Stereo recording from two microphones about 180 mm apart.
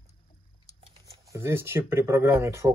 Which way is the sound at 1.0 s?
15° right (ahead or behind).